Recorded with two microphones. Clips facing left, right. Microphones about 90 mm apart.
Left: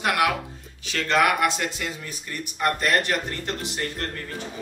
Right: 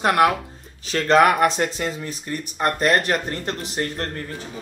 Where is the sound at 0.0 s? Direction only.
40° right (ahead or behind).